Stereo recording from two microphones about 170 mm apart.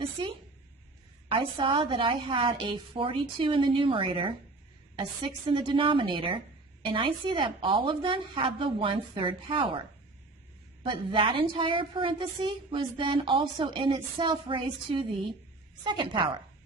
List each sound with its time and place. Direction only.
0.0 s a sound: 30° right (ahead or behind)
1.3 s a woman's voice: 30° right (ahead or behind)
10.8 s a woman's voice: 30° right (ahead or behind)